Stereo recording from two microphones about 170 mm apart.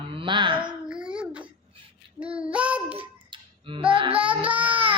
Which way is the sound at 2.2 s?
5° right (ahead or behind).